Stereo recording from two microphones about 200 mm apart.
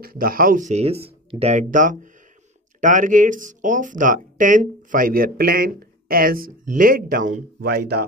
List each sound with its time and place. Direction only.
0.0 s speech: 45° right (ahead or behind)